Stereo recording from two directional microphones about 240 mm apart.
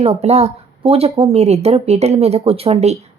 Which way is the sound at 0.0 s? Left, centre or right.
Right.